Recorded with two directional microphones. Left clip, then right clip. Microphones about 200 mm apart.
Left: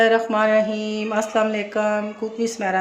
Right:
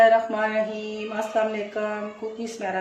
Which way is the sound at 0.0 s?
55° left (ahead or behind).